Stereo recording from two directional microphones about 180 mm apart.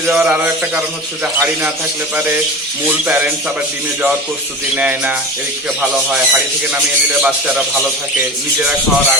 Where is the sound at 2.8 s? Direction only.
10° right (ahead or behind).